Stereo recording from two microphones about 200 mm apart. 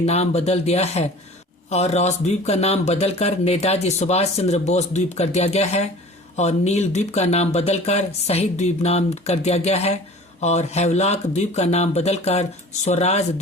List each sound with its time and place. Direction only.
0.0 s speech: 30° left (ahead or behind)